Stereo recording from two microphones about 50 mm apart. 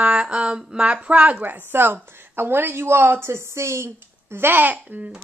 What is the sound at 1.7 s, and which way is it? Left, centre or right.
A woman's voice, right.